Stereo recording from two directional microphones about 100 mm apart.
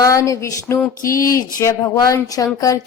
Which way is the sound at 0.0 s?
35° left (ahead or behind).